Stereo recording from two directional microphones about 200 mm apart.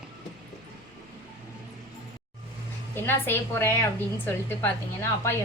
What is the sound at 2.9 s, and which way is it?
A woman's voice, 10° left (ahead or behind).